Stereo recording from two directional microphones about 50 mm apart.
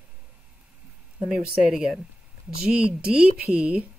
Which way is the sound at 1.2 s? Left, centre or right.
Centre.